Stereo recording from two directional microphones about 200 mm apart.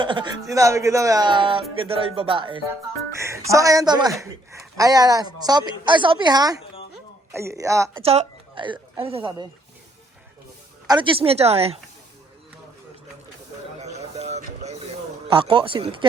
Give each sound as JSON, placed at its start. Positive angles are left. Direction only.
{"t": 0.0, "sound": "a man's voice", "side_deg": -25}
{"t": 3.2, "sound": "a man's voice", "side_deg": -15}
{"t": 8.0, "sound": "a woman's voice", "side_deg": -30}
{"t": 10.8, "sound": "a man's voice", "side_deg": -25}
{"t": 13.7, "sound": "a sound", "side_deg": -35}
{"t": 15.3, "sound": "a man's voice", "side_deg": -25}